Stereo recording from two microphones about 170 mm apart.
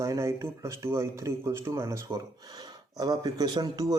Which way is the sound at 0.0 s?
15° right (ahead or behind).